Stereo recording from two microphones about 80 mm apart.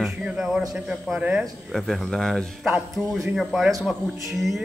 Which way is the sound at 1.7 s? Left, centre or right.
Centre.